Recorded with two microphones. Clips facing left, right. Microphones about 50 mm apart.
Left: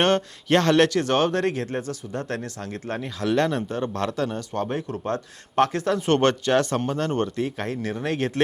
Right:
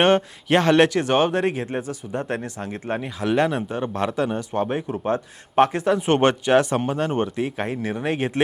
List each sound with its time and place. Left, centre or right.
0.0 s speech: centre